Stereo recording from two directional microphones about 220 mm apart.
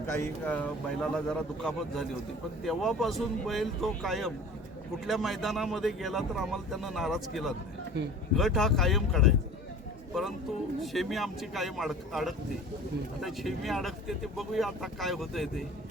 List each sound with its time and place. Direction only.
0.1 s speech: 10° left (ahead or behind)
7.9 s speech: 50° right (ahead or behind)
8.4 s speech: centre (ahead or behind)
10.8 s speech: centre (ahead or behind)